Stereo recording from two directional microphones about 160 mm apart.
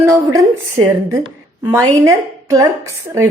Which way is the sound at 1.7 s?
20° right (ahead or behind).